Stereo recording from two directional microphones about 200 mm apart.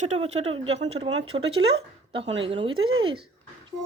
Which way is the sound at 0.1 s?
30° right (ahead or behind).